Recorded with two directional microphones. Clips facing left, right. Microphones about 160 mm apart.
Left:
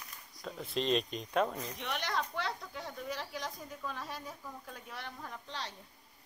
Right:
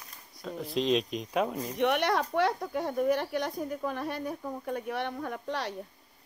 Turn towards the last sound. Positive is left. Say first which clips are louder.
# right 10 dB
turn(degrees=-65)  # may be behind; listen again after turning